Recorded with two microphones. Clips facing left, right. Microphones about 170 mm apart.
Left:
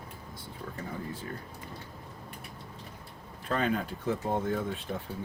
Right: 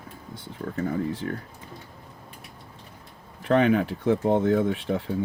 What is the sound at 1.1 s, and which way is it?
Speech, 85° right.